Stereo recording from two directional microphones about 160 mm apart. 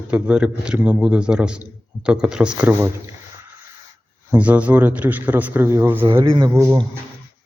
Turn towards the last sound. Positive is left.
turn(degrees=-20)  # may be behind; listen again after turning